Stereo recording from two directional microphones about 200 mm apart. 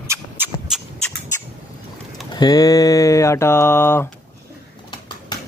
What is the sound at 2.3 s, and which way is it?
Mantra, 20° left (ahead or behind).